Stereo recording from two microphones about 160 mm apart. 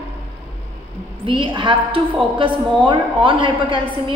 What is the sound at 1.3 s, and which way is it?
A woman's voice, 30° right (ahead or behind).